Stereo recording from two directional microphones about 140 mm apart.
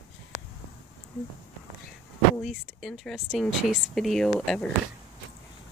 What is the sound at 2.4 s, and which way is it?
Speech, centre (ahead or behind).